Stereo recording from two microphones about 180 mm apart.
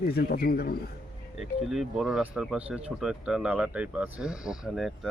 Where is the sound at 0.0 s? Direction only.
60° left (ahead or behind).